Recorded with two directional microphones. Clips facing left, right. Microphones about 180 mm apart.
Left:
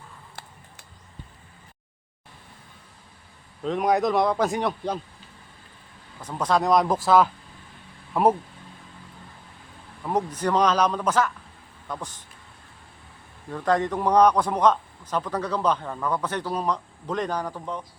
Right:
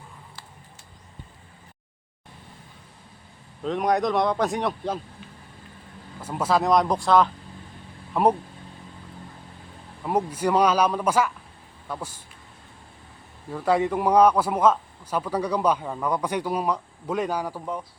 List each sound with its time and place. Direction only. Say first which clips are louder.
0.4 s a sound: left 3 dB; 55° left (ahead or behind)
3.6 s speech: left 1 dB; centre (ahead or behind)
6.2 s speech: even; 5° right (ahead or behind)
10.0 s a man's voice: right 1 dB; 10° right (ahead or behind)
13.5 s a man's voice: right 1 dB; 5° right (ahead or behind)